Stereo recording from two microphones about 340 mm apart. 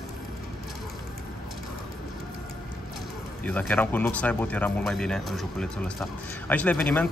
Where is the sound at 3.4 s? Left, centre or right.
Centre.